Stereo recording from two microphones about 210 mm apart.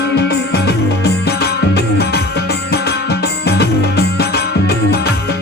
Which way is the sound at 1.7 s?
50° left (ahead or behind).